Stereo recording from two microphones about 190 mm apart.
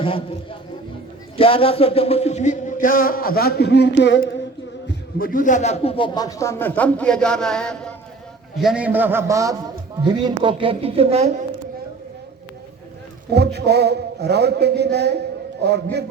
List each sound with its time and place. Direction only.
1.4 s music: 30° left (ahead or behind); by 4.4 s 65° left (ahead or behind)
4.9 s a man's voice: 50° left (ahead or behind); by 11.3 s 35° right (ahead or behind)
13.3 s a sound: 60° right (ahead or behind)